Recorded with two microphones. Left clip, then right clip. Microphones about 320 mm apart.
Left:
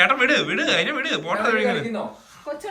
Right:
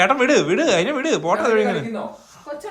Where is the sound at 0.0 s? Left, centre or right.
Centre.